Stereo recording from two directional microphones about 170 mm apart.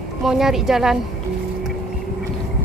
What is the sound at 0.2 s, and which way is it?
Speech, centre (ahead or behind).